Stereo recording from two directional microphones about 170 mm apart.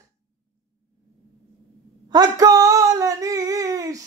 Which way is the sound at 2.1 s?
20° right (ahead or behind).